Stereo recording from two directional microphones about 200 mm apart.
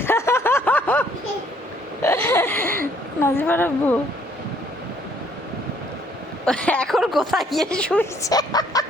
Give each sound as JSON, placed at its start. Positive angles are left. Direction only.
{"t": 0.0, "sound": "a sound", "side_deg": 10}
{"t": 3.2, "sound": "a woman's voice", "side_deg": 10}
{"t": 6.4, "sound": "speech", "side_deg": 5}
{"t": 8.2, "sound": "speech", "side_deg": 20}